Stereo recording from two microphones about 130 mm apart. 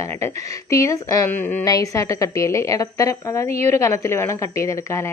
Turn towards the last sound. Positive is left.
turn(degrees=20)  # may be behind; listen again after turning